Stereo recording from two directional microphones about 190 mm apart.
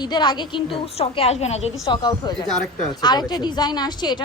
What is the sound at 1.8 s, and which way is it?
A woman's voice, 20° left (ahead or behind).